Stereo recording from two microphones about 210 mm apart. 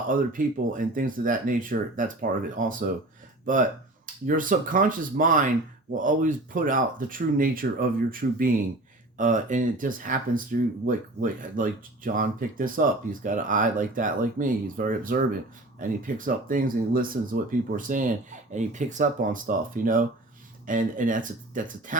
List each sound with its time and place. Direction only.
0.1 s speech: 40° right (ahead or behind)
4.0 s speech: 40° right (ahead or behind)